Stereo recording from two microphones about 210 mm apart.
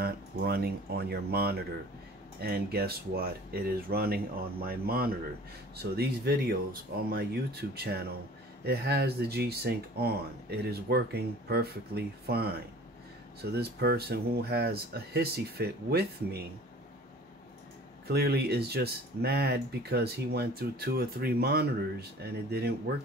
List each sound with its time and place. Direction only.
0.0 s speech: 45° right (ahead or behind)
18.0 s speech: 50° right (ahead or behind)